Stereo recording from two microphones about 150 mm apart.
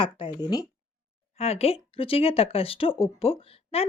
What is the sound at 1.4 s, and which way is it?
Speech, 45° left (ahead or behind).